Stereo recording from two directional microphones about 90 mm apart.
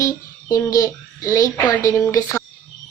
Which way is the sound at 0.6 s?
40° left (ahead or behind).